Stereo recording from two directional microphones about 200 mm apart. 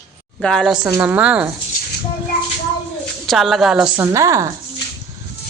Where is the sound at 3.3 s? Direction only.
Centre (ahead or behind).